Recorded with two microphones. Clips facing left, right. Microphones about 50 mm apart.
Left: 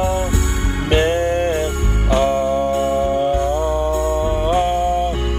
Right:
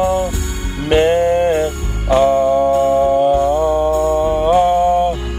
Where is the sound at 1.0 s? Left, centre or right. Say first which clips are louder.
Right 6 dB; right.